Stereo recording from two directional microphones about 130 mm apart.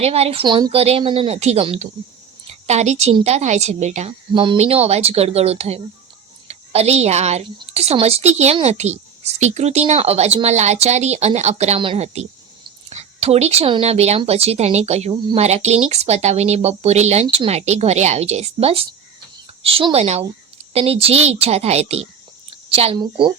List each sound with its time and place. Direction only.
0.0 s speech: 50° right (ahead or behind)
0.4 s speech: 35° right (ahead or behind)
0.7 s a woman's voice: 50° right (ahead or behind)
4.3 s speech: 35° right (ahead or behind)
4.5 s a woman's voice: 50° right (ahead or behind)
22.4 s a sound: 50° right (ahead or behind)
23.0 s speech: 40° right (ahead or behind)